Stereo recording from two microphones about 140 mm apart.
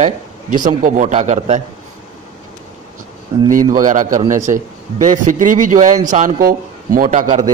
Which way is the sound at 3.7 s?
65° right (ahead or behind).